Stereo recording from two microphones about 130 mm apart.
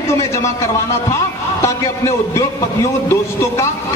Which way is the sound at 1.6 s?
20° left (ahead or behind).